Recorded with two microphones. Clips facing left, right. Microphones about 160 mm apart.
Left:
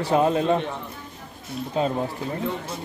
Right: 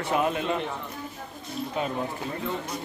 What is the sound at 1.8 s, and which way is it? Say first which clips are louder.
Speech: left 7 dB; 30° left (ahead or behind).